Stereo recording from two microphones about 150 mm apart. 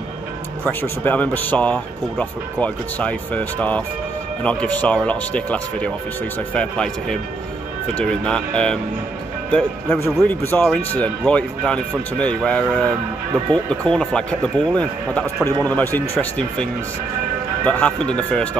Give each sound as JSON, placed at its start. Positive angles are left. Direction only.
{"t": 0.7, "sound": "speech", "side_deg": 10}
{"t": 17.6, "sound": "speech", "side_deg": 10}